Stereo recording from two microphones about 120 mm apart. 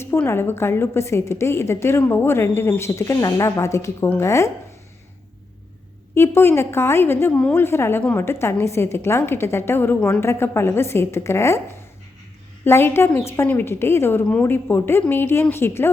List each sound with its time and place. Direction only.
0.0 s a woman's voice: 20° left (ahead or behind)
6.1 s a woman's voice: 20° left (ahead or behind)
7.6 s a woman's voice: 20° left (ahead or behind)